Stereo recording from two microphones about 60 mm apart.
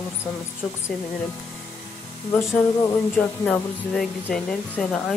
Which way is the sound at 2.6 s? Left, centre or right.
Centre.